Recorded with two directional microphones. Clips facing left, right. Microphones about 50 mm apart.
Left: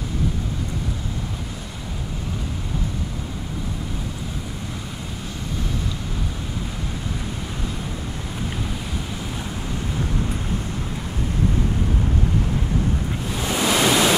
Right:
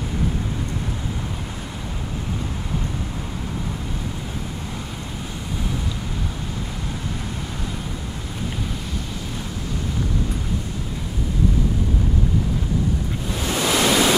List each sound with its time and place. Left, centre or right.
13.5 s pink noise: centre